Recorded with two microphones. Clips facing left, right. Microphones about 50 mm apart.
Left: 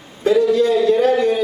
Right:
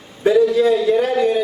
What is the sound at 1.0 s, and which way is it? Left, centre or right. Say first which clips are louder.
Speech: left 1 dB; centre.